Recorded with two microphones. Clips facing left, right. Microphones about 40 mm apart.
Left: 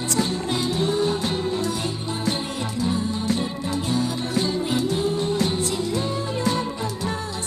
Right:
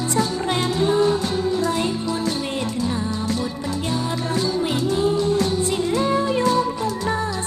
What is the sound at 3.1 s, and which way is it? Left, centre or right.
Music, left.